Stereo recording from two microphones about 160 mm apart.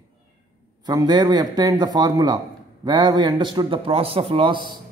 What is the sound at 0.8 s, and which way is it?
A man's voice, 25° right (ahead or behind).